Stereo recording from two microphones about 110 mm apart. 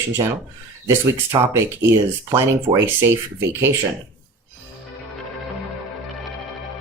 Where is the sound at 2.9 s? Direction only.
25° right (ahead or behind).